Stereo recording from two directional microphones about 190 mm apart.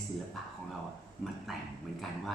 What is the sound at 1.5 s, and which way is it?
Speech, centre (ahead or behind).